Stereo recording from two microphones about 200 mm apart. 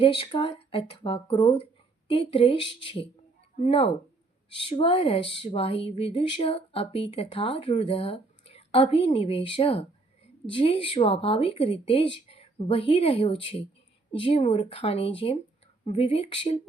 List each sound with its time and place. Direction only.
0.0 s speech: 30° left (ahead or behind)